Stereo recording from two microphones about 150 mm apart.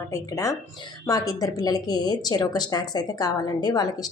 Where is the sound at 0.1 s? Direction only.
20° left (ahead or behind).